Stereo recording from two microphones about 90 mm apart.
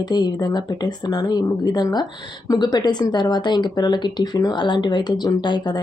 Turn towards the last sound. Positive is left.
turn(degrees=55)  # may be behind; listen again after turning